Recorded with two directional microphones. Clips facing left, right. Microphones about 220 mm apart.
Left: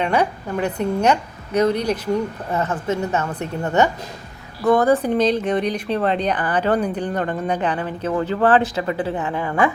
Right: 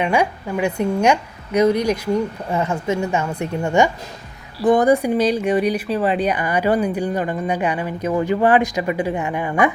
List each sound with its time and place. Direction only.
0.0 s speech: 10° right (ahead or behind)